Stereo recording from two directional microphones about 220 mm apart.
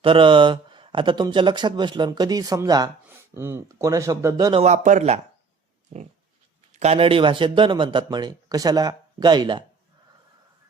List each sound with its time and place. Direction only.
0.0 s speech: 25° right (ahead or behind)
4.6 s speech: 35° right (ahead or behind)
6.7 s speech: 30° right (ahead or behind)